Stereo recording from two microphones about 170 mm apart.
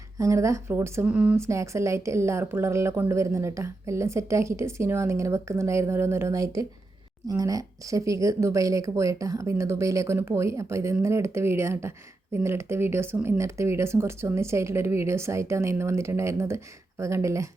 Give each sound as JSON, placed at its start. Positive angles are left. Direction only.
{"t": 0.2, "sound": "a woman's voice", "side_deg": -20}